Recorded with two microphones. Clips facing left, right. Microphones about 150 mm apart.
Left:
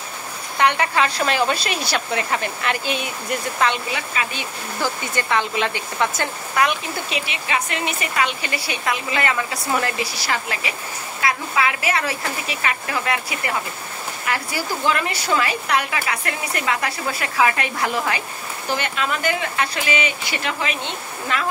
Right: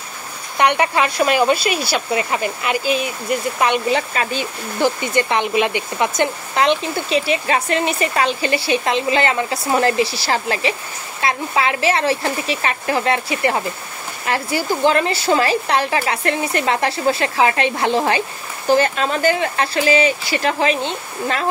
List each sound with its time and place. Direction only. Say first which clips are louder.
0.6 s speech: right 3 dB; 20° right (ahead or behind); by 3.1 s 5° right (ahead or behind)
3.5 s speech: right 2 dB; 15° right (ahead or behind)
3.9 s speech: right 7 dB; 35° right (ahead or behind)
4.8 s speech: right 7 dB; 20° right (ahead or behind)